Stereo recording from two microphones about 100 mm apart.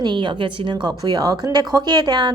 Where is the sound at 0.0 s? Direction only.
50° right (ahead or behind).